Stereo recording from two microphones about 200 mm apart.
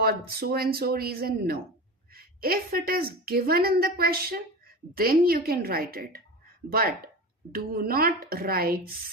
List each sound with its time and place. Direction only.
0.0 s a woman's voice: 50° right (ahead or behind)